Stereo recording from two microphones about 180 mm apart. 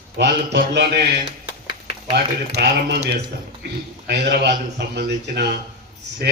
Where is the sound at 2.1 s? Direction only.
65° right (ahead or behind).